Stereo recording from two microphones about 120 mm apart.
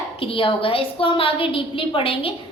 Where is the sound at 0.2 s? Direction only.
50° left (ahead or behind).